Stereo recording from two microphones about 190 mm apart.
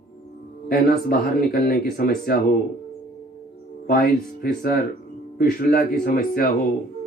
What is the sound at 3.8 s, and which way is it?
Speech, 50° left (ahead or behind).